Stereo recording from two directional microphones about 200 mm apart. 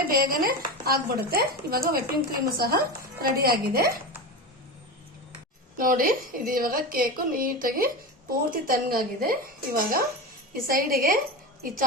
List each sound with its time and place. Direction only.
0.1 s speech: 45° right (ahead or behind)
5.7 s speech: 45° right (ahead or behind)